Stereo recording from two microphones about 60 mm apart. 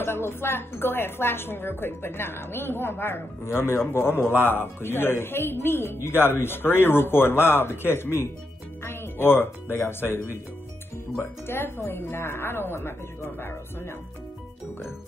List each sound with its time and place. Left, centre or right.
0.0 s a woman's voice: left